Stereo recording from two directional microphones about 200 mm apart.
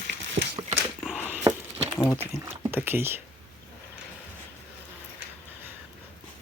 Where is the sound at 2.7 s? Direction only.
10° right (ahead or behind).